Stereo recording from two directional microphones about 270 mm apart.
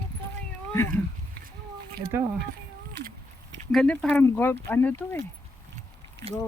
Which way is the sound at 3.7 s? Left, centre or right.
Centre.